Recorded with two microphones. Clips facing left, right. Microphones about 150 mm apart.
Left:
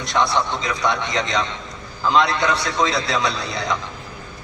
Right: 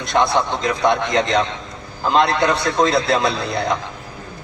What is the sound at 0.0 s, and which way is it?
A man's voice, 55° right (ahead or behind).